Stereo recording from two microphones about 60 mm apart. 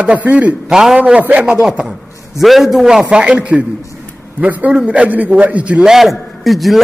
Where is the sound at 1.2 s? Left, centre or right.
Right.